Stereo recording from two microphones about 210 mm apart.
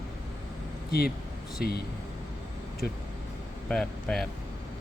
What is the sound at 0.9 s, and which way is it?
Speech, 45° left (ahead or behind).